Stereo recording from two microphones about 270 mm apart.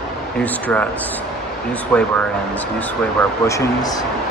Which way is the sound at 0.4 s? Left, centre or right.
Centre.